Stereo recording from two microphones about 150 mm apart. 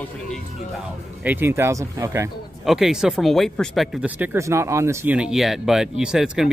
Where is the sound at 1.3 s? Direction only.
15° right (ahead or behind).